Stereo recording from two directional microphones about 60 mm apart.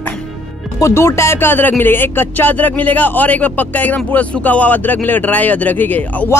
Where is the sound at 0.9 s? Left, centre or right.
Left.